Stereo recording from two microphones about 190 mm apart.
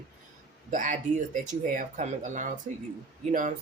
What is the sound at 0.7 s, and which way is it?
Speech, 45° right (ahead or behind).